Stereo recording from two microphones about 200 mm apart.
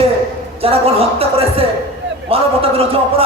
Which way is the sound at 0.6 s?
30° right (ahead or behind).